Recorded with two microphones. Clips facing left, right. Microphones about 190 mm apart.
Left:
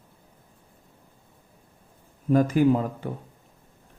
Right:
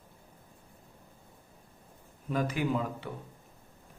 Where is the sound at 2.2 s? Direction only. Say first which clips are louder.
Left 11 dB; 45° left (ahead or behind).